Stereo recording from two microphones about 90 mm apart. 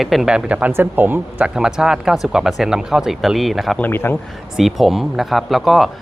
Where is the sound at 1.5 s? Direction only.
5° right (ahead or behind).